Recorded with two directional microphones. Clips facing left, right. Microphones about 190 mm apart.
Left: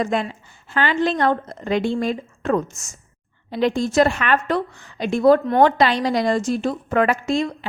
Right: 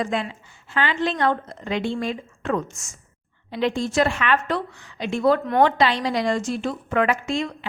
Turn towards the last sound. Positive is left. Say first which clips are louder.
# left 4 dB
turn(degrees=40)  # may be behind; listen again after turning